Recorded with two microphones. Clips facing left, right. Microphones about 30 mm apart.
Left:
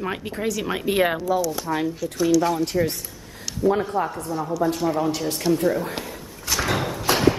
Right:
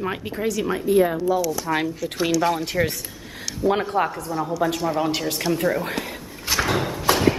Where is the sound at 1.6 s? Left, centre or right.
Right.